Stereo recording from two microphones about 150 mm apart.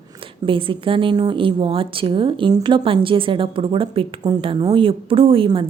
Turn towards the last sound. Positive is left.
turn(degrees=-35)  # may be behind; listen again after turning